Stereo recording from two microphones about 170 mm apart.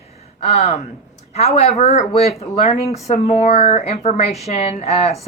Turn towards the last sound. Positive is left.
turn(degrees=40)  # may be behind; listen again after turning